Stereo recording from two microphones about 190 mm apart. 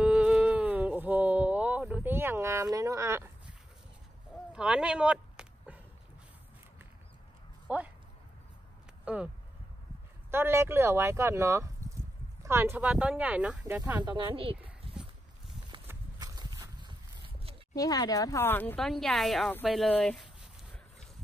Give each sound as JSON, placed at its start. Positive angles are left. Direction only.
{"t": 0.0, "sound": "a sound", "side_deg": -5}
{"t": 7.6, "sound": "a sound", "side_deg": -10}
{"t": 9.0, "sound": "speech", "side_deg": -5}
{"t": 10.3, "sound": "speech", "side_deg": -15}
{"t": 14.0, "sound": "speech", "side_deg": -25}
{"t": 15.9, "sound": "walk", "side_deg": -20}
{"t": 17.7, "sound": "speech", "side_deg": 20}